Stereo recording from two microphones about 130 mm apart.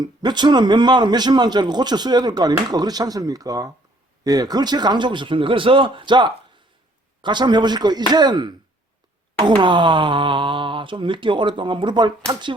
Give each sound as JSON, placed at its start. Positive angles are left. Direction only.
{"t": 0.0, "sound": "speech", "side_deg": -35}